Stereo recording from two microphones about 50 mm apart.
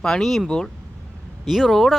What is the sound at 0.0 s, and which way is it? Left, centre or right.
Speech, centre.